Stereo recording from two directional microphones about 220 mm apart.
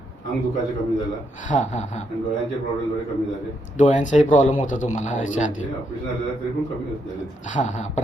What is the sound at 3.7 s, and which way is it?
Speech, 35° left (ahead or behind).